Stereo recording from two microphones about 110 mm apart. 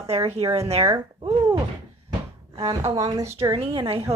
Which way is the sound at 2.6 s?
65° right (ahead or behind).